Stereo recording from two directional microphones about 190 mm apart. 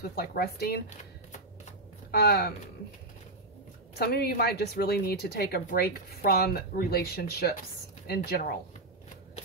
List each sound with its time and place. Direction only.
0.0 s speech: 55° left (ahead or behind)
2.0 s speech: 55° left (ahead or behind)
4.0 s speech: 55° left (ahead or behind)